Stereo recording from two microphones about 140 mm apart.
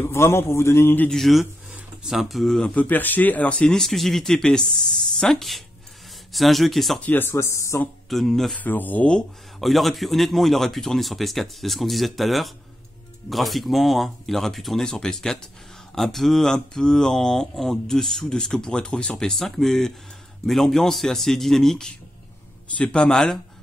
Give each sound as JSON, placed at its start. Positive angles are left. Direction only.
{"t": 0.0, "sound": "a man's voice", "side_deg": 20}
{"t": 1.1, "sound": "speech", "side_deg": 0}
{"t": 7.1, "sound": "a man's voice", "side_deg": 15}
{"t": 8.1, "sound": "speech", "side_deg": 0}
{"t": 8.6, "sound": "a man's voice", "side_deg": 15}